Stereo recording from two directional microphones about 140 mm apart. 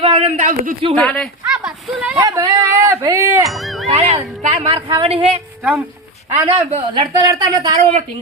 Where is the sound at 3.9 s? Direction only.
50° right (ahead or behind).